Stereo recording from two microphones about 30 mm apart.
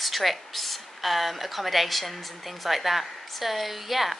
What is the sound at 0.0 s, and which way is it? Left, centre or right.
A woman's voice, centre.